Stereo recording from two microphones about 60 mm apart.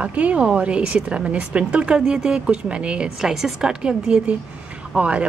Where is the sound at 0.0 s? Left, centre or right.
Right.